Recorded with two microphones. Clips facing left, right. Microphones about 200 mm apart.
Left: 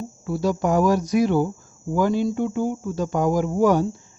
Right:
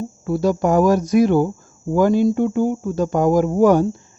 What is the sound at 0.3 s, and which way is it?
A woman's voice, 50° right (ahead or behind).